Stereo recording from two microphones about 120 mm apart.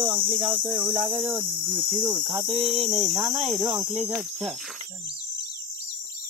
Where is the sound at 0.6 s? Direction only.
15° right (ahead or behind).